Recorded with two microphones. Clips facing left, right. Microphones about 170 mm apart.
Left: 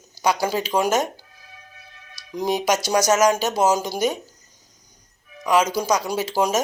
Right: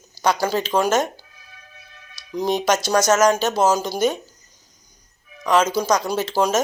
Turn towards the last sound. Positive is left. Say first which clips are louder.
# right 1 dB
turn(degrees=15)  # may be behind; listen again after turning